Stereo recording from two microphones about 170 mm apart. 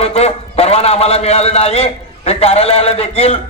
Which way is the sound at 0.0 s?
40° left (ahead or behind).